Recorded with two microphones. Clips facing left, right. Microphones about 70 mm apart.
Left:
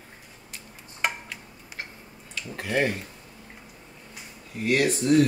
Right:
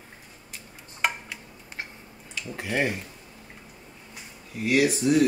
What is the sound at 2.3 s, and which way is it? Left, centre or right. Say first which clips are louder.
Speech: left 1 dB; centre.